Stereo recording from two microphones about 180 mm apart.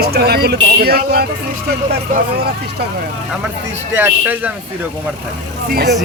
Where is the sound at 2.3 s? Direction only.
60° right (ahead or behind).